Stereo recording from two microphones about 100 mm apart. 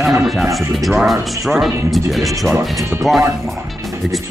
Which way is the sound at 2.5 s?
25° right (ahead or behind).